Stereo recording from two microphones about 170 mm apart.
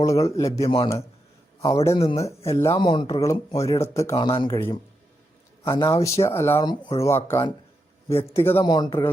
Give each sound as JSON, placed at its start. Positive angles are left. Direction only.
{"t": 0.0, "sound": "speech", "side_deg": 20}
{"t": 0.6, "sound": "speech", "side_deg": 30}
{"t": 1.6, "sound": "speech", "side_deg": 20}
{"t": 2.0, "sound": "speech", "side_deg": 35}
{"t": 2.2, "sound": "speech", "side_deg": 15}
{"t": 4.3, "sound": "speech", "side_deg": 30}
{"t": 5.7, "sound": "speech", "side_deg": 20}
{"t": 6.6, "sound": "speech", "side_deg": 25}
{"t": 8.5, "sound": "speech", "side_deg": 25}